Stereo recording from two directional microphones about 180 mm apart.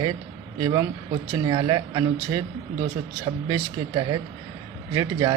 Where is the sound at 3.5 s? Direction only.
20° right (ahead or behind).